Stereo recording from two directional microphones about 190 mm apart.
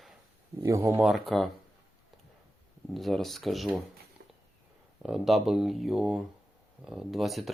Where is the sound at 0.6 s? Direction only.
15° right (ahead or behind).